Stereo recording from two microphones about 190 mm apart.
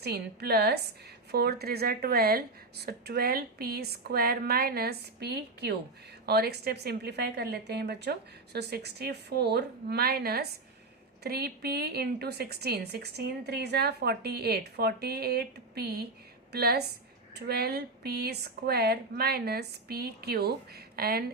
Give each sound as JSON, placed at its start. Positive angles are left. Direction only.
{"t": 0.0, "sound": "a woman's voice", "side_deg": -55}